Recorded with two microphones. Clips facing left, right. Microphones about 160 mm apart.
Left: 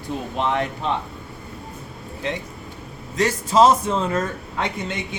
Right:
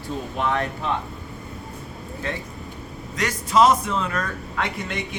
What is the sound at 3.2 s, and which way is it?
Speech, 30° left (ahead or behind).